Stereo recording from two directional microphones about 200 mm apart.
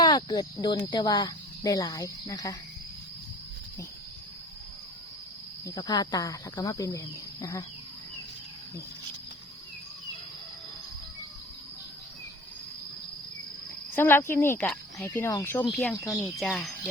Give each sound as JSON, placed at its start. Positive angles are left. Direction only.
{"t": 0.0, "sound": "speech", "side_deg": 25}
{"t": 5.6, "sound": "speech", "side_deg": 20}
{"t": 13.9, "sound": "speech", "side_deg": 10}
{"t": 15.7, "sound": "speech", "side_deg": 0}